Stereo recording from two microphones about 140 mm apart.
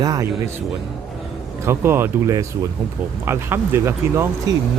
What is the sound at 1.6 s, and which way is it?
Speech, 15° right (ahead or behind).